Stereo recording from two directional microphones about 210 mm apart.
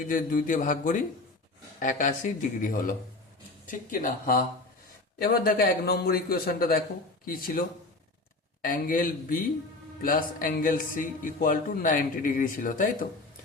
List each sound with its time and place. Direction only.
0.1 s speech: 40° left (ahead or behind)
5.2 s a man's voice: 45° left (ahead or behind)
8.6 s speech: 40° left (ahead or behind)